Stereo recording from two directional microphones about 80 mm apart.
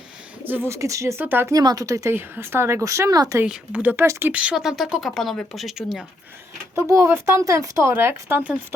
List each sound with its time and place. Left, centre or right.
0.4 s speech: right
0.7 s speech: right
1.2 s speech: right
1.5 s speech: right
2.1 s speech: right
3.4 s a woman's voice: centre
4.0 s speech: right
4.3 s speech: centre
6.7 s speech: right